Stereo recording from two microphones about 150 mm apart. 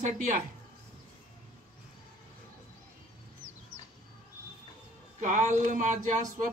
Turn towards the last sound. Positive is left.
turn(degrees=-55)  # may be behind; listen again after turning